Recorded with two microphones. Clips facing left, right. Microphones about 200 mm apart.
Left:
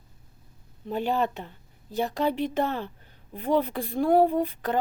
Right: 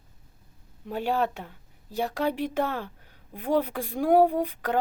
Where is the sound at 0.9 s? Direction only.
10° right (ahead or behind).